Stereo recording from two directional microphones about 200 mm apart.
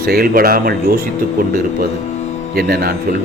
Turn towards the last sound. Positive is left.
turn(degrees=-50)  # may be behind; listen again after turning